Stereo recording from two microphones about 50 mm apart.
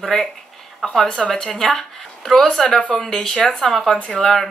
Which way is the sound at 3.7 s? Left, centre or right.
Centre.